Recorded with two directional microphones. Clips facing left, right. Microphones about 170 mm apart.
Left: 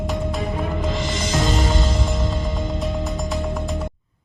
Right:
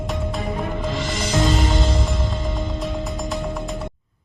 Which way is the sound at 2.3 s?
Centre (ahead or behind).